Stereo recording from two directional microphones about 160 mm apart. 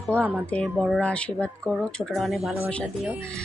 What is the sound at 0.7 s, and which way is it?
Speech, centre (ahead or behind).